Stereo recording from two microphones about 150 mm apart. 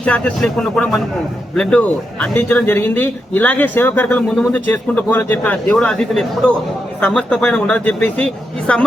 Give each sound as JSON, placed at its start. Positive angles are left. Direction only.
{"t": 0.0, "sound": "a man's voice", "side_deg": 10}